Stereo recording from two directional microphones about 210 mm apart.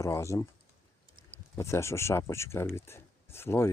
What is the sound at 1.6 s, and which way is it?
Speech, 15° left (ahead or behind).